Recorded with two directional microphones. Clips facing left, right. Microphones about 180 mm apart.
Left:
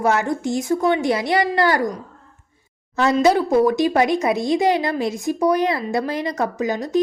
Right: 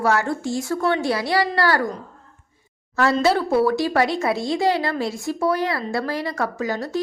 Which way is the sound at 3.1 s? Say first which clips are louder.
Left 4 dB; 15° left (ahead or behind).